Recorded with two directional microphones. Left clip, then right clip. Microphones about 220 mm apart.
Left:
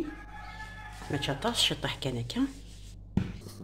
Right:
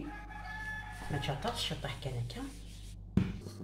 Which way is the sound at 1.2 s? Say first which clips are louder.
Left 9 dB; 55° left (ahead or behind).